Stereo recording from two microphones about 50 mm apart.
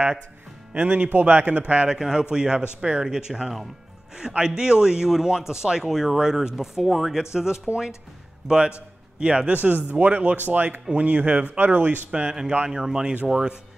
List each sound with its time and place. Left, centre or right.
0.7 s a man's voice: right
1.9 s a man's voice: centre
9.5 s speech: right
12.3 s speech: centre